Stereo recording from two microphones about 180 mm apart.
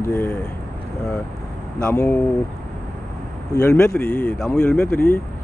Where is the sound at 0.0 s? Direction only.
10° left (ahead or behind).